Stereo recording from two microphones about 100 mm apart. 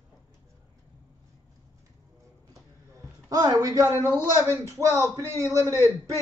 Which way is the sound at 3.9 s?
25° left (ahead or behind).